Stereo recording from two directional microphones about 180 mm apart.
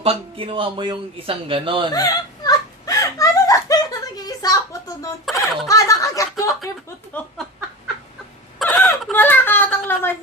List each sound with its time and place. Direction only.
0.0 s a man's voice: 30° right (ahead or behind)
1.9 s whimper: 20° left (ahead or behind)
5.6 s speech: 20° left (ahead or behind)
7.1 s a sound: 10° left (ahead or behind)
8.5 s wail: 5° left (ahead or behind)